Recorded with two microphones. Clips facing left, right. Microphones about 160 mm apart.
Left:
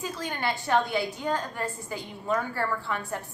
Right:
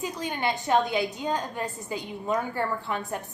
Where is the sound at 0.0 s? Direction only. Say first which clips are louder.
Right 2 dB; 20° right (ahead or behind).